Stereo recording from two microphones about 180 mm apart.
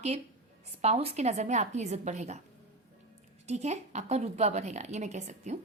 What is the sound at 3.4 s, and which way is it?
A woman's voice, 40° right (ahead or behind).